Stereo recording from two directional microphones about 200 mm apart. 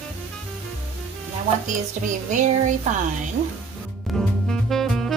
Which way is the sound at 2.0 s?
40° right (ahead or behind).